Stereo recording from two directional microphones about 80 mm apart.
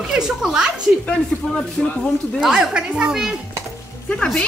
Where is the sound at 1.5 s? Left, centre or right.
Centre.